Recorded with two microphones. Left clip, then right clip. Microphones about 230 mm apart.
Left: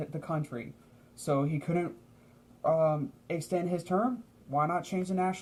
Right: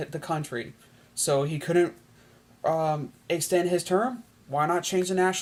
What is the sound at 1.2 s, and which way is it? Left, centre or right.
Speech, right.